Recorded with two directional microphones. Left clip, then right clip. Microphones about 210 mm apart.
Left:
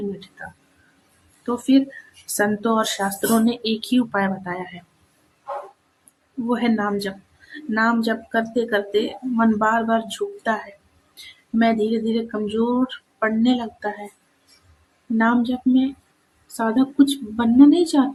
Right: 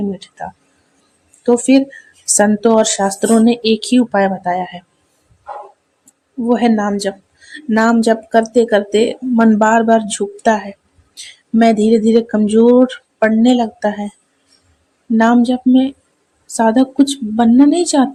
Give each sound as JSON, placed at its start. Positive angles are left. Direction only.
{"t": 1.5, "sound": "speech", "side_deg": -30}
{"t": 6.5, "sound": "speech", "side_deg": -25}
{"t": 15.2, "sound": "speech", "side_deg": -35}